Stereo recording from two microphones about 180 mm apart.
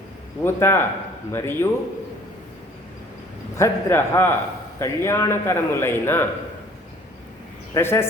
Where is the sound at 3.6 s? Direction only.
15° left (ahead or behind).